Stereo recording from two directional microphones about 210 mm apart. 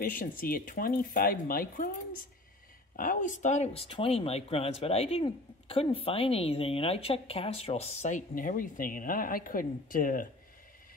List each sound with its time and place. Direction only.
0.0 s speech: 40° left (ahead or behind)
3.0 s speech: 40° left (ahead or behind)